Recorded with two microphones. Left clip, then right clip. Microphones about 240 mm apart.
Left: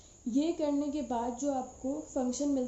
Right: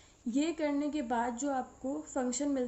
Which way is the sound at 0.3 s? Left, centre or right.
Right.